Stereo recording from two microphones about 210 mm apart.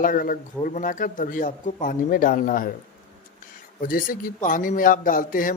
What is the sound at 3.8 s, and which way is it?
Speech, 40° left (ahead or behind).